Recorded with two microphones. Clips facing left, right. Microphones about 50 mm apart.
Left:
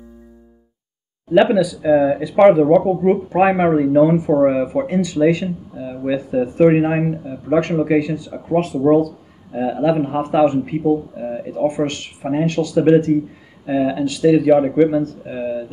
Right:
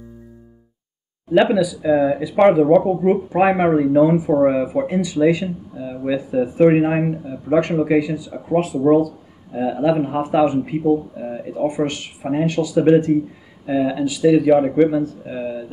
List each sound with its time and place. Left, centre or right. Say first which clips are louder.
1.3 s speech: left 2 dB; centre